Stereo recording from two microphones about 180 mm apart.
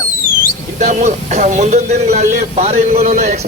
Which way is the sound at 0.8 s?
45° right (ahead or behind).